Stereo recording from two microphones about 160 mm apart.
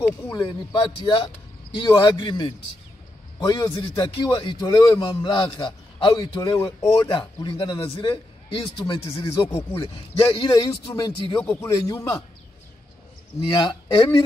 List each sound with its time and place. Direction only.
0.9 s a man's voice: 30° left (ahead or behind)
13.5 s a man's voice: 30° left (ahead or behind)